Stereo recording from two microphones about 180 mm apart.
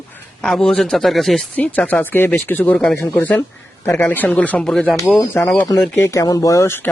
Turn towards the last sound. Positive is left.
turn(degrees=15)  # may be behind; listen again after turning